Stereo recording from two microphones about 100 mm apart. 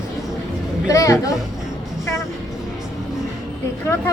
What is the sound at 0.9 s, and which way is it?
Speech, 35° left (ahead or behind).